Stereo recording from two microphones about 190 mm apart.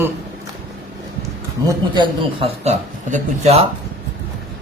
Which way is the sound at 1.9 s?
25° right (ahead or behind).